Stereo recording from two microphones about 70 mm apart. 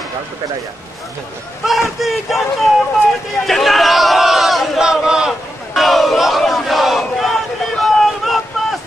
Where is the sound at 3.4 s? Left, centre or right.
Centre.